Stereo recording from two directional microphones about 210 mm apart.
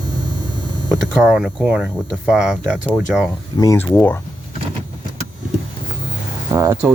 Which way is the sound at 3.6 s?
15° left (ahead or behind).